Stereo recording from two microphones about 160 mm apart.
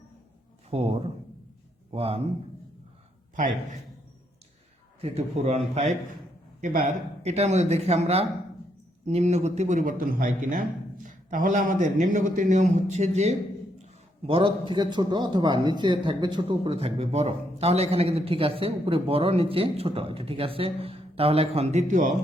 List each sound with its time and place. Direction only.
0.7 s speech: 40° right (ahead or behind)
3.3 s a man's voice: 50° right (ahead or behind)
4.9 s a man's voice: 40° right (ahead or behind)
6.6 s a man's voice: 55° right (ahead or behind)
14.3 s speech: 35° right (ahead or behind); by 22.1 s 50° right (ahead or behind)